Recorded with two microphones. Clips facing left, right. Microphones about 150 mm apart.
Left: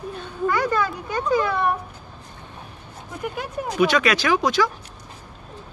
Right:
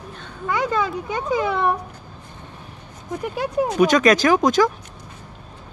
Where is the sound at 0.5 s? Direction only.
20° right (ahead or behind).